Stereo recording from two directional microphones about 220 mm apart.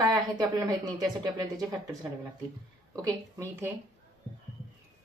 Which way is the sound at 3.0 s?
10° right (ahead or behind).